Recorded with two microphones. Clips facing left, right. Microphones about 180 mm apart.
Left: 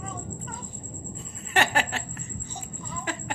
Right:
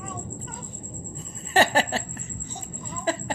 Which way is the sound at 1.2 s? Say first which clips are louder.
Right 5 dB; 35° right (ahead or behind).